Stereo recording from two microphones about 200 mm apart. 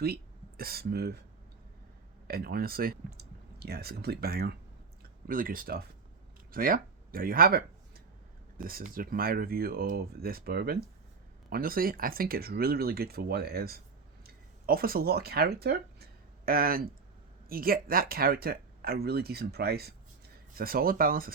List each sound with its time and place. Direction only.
0.0 s speech: 50° right (ahead or behind)
2.2 s speech: 50° right (ahead or behind)